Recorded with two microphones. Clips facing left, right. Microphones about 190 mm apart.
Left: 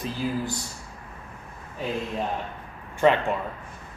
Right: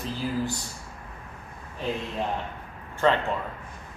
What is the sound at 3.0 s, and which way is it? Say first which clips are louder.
Speech: left 3 dB; 15° left (ahead or behind).